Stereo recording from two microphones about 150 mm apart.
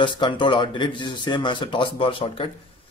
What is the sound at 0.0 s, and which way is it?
Speech, 30° left (ahead or behind).